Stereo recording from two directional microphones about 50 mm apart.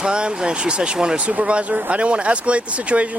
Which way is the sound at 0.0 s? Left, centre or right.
Centre.